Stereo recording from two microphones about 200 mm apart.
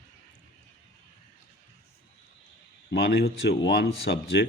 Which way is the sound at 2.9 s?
55° left (ahead or behind).